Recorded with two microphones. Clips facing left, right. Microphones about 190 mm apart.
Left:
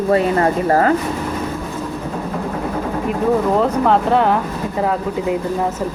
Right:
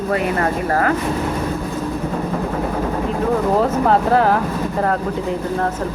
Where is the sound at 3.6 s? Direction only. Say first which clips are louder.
Left 1 dB; centre (ahead or behind).